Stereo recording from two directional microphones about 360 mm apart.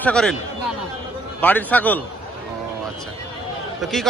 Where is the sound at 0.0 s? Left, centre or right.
Centre.